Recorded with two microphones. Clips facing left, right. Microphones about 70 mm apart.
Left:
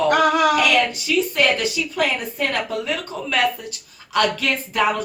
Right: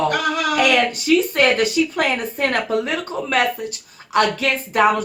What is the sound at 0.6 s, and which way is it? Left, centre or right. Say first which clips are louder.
Speech: right 1 dB; right.